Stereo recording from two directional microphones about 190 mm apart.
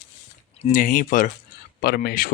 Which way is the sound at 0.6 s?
45° left (ahead or behind).